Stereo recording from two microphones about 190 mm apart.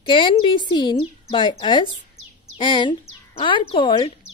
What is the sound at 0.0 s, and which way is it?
Speech, 25° left (ahead or behind).